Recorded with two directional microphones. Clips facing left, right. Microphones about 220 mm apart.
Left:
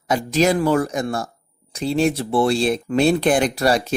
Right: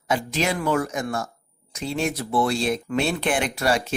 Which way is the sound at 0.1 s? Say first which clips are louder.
Left 6 dB; 40° left (ahead or behind).